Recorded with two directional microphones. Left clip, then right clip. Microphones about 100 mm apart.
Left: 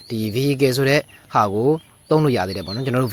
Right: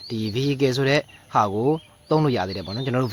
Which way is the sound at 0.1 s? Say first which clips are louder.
Left 4 dB; 5° left (ahead or behind).